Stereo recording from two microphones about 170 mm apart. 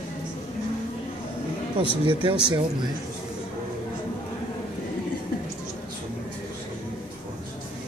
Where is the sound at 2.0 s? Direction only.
30° right (ahead or behind).